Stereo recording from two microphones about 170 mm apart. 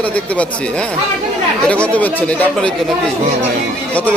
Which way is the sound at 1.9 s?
10° left (ahead or behind).